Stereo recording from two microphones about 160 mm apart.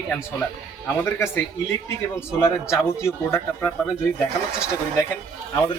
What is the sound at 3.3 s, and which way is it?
Speech, 15° left (ahead or behind).